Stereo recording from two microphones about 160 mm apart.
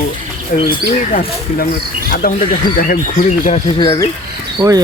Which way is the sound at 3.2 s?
45° left (ahead or behind).